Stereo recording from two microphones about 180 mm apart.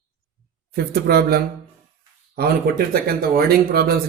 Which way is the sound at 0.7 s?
60° right (ahead or behind).